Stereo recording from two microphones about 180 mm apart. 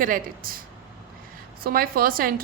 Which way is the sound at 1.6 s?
55° right (ahead or behind).